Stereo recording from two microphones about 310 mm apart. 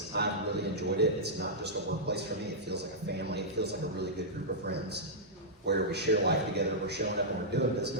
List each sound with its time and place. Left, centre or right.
0.2 s a man's voice: right
5.6 s a man's voice: right